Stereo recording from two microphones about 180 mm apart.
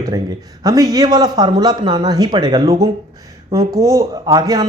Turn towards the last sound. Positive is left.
turn(degrees=-25)  # may be behind; listen again after turning